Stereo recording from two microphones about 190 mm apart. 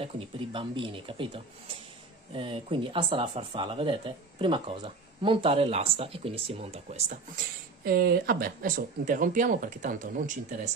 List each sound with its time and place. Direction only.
0.0 s speech: 25° right (ahead or behind)
7.8 s speech: 55° right (ahead or behind)